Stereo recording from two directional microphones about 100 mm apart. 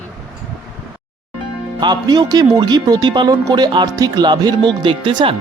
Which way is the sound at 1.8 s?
45° right (ahead or behind).